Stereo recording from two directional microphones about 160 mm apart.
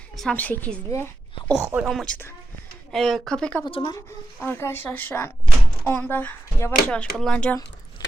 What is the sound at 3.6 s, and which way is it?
Speech, 30° left (ahead or behind).